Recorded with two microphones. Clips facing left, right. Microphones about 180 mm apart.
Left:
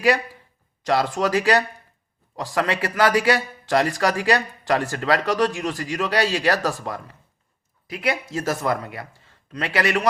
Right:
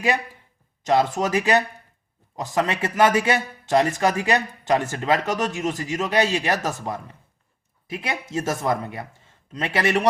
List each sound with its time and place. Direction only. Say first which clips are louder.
0.9 s a man's voice: right 1 dB; 20° right (ahead or behind)